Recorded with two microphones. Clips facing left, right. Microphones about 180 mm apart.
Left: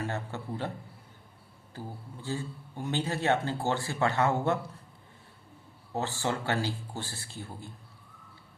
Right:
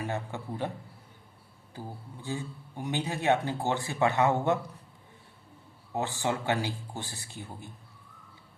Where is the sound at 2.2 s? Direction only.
15° right (ahead or behind).